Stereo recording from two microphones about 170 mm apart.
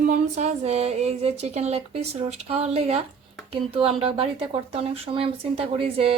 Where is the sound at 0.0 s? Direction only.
45° right (ahead or behind).